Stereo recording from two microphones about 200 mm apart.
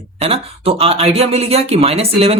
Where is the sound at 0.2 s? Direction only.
30° right (ahead or behind).